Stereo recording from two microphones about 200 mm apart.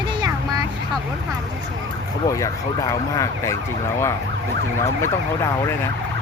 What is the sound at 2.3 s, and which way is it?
Speech, 15° left (ahead or behind).